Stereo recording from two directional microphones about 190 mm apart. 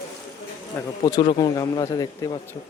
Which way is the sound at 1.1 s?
25° left (ahead or behind).